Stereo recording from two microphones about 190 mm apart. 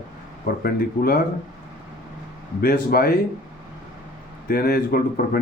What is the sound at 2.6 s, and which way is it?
Speech, 55° left (ahead or behind).